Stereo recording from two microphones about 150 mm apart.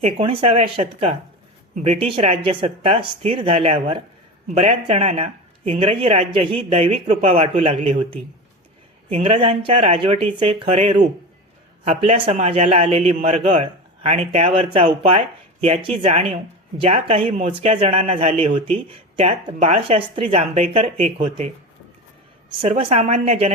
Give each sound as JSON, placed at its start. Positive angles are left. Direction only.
{"t": 0.0, "sound": "speech", "side_deg": -40}
{"t": 9.0, "sound": "speech", "side_deg": -45}
{"t": 22.6, "sound": "a woman's voice", "side_deg": -40}